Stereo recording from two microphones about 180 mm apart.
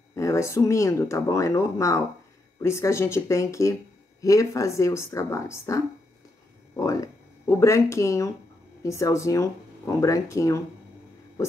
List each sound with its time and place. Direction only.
0.1 s speech: 15° left (ahead or behind)